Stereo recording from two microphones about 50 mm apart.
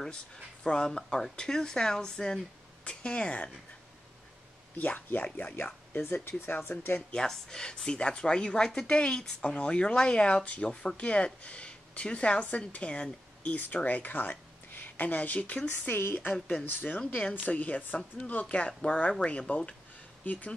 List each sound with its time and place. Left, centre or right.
0.7 s speech: centre
4.7 s speech: left
7.0 s speech: centre
15.8 s speech: left
17.3 s speech: left